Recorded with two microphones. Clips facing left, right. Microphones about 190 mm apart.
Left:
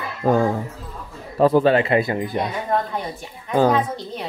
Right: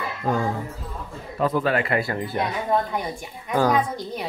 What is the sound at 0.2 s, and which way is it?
Speech, 40° left (ahead or behind).